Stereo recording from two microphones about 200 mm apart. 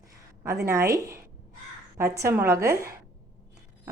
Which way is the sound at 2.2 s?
10° right (ahead or behind).